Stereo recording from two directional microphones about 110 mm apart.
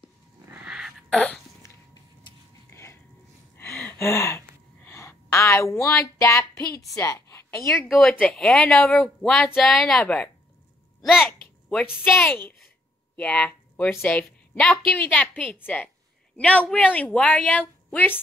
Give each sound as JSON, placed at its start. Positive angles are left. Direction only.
{"t": 0.7, "sound": "a sound", "side_deg": -5}
{"t": 1.1, "sound": "a sound", "side_deg": 10}
{"t": 2.7, "sound": "a sound", "side_deg": 25}
{"t": 3.5, "sound": "gasp", "side_deg": 20}
{"t": 7.0, "sound": "a woman's voice", "side_deg": 25}
{"t": 8.0, "sound": "a woman's voice", "side_deg": 5}
{"t": 11.0, "sound": "speech", "side_deg": 0}
{"t": 11.8, "sound": "a woman's voice", "side_deg": 20}
{"t": 12.1, "sound": "a woman's voice", "side_deg": 10}